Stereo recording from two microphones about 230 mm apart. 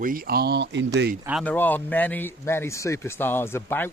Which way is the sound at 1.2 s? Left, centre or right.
Centre.